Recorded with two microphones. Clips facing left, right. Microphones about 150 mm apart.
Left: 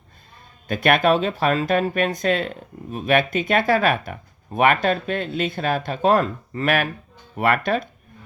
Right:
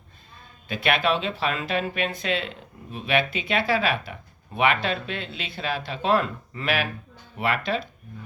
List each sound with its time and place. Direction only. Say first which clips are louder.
0.7 s speech: left 6 dB; 50° left (ahead or behind)